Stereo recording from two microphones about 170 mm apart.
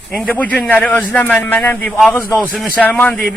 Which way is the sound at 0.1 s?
10° left (ahead or behind).